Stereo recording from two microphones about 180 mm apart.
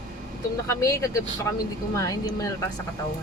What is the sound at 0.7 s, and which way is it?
Speech, 15° left (ahead or behind).